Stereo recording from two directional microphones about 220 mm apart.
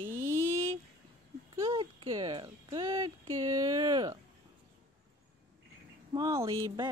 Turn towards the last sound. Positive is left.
turn(degrees=-15)  # may be behind; listen again after turning